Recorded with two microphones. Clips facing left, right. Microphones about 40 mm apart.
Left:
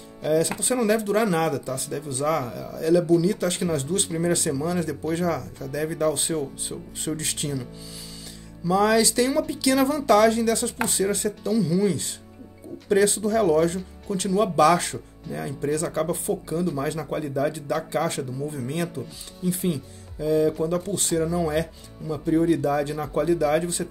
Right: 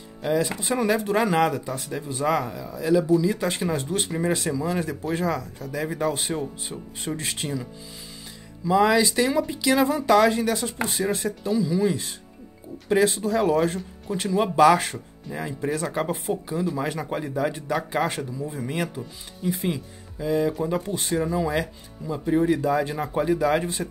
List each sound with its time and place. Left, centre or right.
0.4 s speech: centre
8.6 s speech: right
16.6 s speech: right
23.6 s speech: right